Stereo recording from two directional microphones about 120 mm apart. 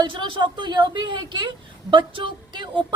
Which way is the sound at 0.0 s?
45° right (ahead or behind).